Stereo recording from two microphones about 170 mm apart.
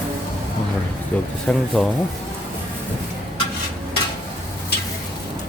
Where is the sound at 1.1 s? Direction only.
10° left (ahead or behind).